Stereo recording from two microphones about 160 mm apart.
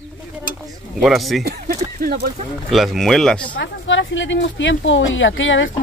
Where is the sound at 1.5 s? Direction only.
70° right (ahead or behind).